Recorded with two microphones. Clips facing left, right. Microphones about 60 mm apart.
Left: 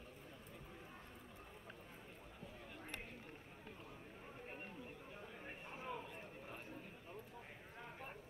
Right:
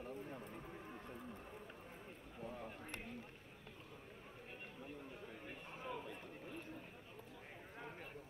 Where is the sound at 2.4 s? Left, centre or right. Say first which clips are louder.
Right 8 dB; right.